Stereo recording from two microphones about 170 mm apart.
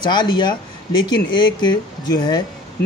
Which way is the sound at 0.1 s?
25° left (ahead or behind).